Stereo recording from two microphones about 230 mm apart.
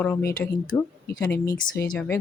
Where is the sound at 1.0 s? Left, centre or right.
Left.